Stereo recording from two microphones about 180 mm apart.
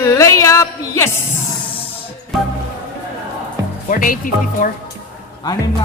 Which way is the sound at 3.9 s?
50° left (ahead or behind).